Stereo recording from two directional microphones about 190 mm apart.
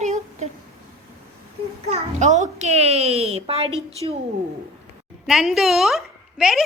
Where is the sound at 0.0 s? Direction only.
35° right (ahead or behind).